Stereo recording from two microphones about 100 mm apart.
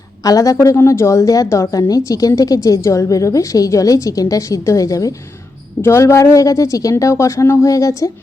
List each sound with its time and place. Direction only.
0.2 s a woman's voice: 35° left (ahead or behind)